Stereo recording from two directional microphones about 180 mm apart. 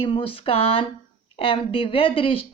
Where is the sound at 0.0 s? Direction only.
30° left (ahead or behind).